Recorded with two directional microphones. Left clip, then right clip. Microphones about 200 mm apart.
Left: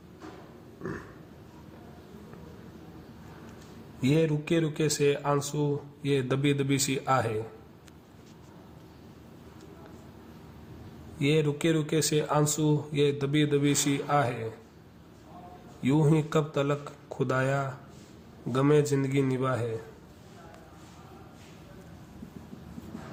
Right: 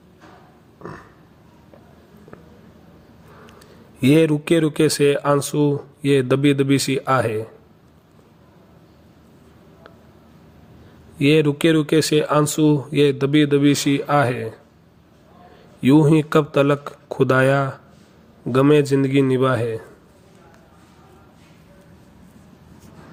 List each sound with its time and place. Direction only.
4.0 s speech: 40° right (ahead or behind)
11.2 s speech: 35° right (ahead or behind)
15.8 s speech: 35° right (ahead or behind)